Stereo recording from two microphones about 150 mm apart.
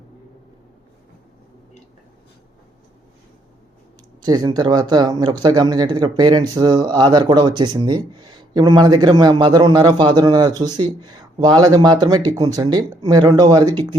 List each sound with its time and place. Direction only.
4.2 s speech: 25° right (ahead or behind)